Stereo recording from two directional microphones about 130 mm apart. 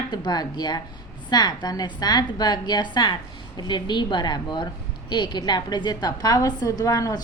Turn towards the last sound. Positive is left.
turn(degrees=25)  # may be behind; listen again after turning